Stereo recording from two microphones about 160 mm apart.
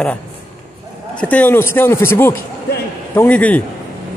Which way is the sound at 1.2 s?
10° left (ahead or behind).